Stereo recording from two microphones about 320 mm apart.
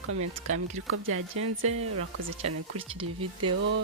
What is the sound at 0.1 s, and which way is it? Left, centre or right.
Speech, right.